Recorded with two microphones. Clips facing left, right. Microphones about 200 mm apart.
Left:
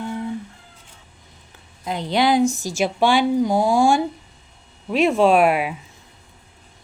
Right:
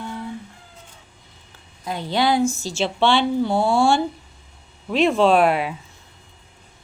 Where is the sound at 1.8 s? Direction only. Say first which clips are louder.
Left 2 dB; 20° left (ahead or behind).